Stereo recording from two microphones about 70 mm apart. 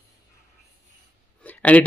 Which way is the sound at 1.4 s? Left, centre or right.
Left.